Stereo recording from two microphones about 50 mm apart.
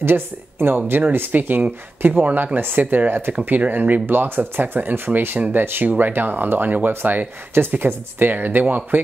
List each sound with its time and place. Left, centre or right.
0.0 s speech: right